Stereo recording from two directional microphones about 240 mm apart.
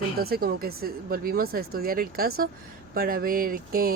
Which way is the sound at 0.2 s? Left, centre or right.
Right.